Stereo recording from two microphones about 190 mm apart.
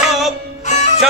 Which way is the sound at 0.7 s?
35° left (ahead or behind).